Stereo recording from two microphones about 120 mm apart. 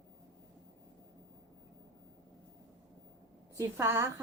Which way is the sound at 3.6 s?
20° right (ahead or behind).